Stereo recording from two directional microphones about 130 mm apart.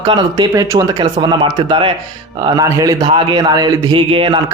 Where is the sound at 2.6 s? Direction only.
25° right (ahead or behind).